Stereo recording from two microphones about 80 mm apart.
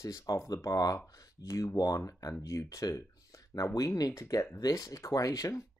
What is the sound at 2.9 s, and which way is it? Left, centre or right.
Speech, left.